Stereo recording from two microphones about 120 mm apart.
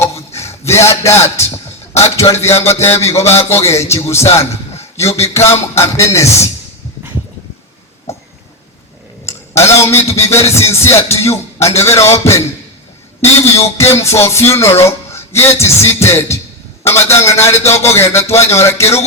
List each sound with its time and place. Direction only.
0.0 s a sound: 25° left (ahead or behind)
0.3 s a man's voice: 25° left (ahead or behind)
1.9 s music: 25° left (ahead or behind)
2.8 s speech: 20° left (ahead or behind)
3.2 s a man's voice: 60° left (ahead or behind)
3.5 s speech: 25° left (ahead or behind)
9.2 s a man's voice: 25° left (ahead or behind)